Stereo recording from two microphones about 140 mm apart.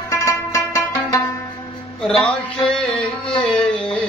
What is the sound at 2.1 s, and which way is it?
Music, 5° left (ahead or behind).